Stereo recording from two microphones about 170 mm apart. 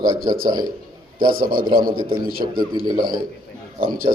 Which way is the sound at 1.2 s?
55° right (ahead or behind).